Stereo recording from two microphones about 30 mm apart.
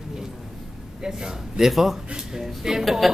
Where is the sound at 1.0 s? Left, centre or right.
Centre.